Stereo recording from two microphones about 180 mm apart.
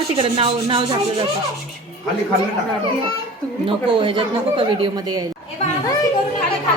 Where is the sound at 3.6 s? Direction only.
30° right (ahead or behind).